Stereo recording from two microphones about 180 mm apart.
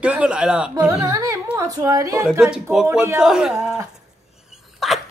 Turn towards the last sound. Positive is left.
turn(degrees=0)  # may be behind; listen again after turning